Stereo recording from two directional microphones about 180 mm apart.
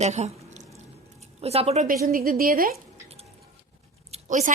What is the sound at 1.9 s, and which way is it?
Speech, 55° right (ahead or behind).